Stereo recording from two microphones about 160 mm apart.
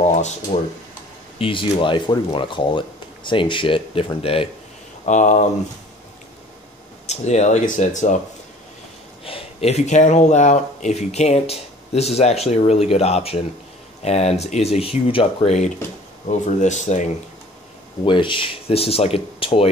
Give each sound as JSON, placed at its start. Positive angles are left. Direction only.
{"t": 0.0, "sound": "a sound", "side_deg": 45}
{"t": 1.4, "sound": "speech", "side_deg": 30}
{"t": 5.0, "sound": "speech", "side_deg": 50}
{"t": 7.1, "sound": "speech", "side_deg": 45}
{"t": 9.2, "sound": "speech", "side_deg": 35}
{"t": 18.0, "sound": "speech", "side_deg": 30}